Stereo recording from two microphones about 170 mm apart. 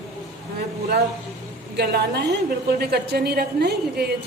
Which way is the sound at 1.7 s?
75° right (ahead or behind).